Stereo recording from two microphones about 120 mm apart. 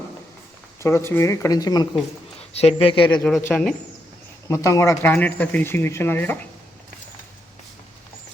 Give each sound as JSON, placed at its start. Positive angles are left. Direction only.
{"t": 0.8, "sound": "speech", "side_deg": 20}
{"t": 2.5, "sound": "speech", "side_deg": 60}
{"t": 3.5, "sound": "speech", "side_deg": 5}
{"t": 4.4, "sound": "speech", "side_deg": 25}